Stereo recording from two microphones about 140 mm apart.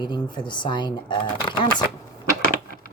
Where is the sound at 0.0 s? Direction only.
35° left (ahead or behind).